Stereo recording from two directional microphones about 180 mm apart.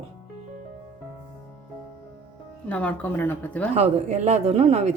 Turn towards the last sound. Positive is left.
turn(degrees=-35)  # may be behind; listen again after turning